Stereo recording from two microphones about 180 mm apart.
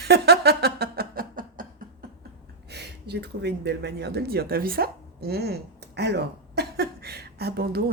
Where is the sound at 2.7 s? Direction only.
65° right (ahead or behind).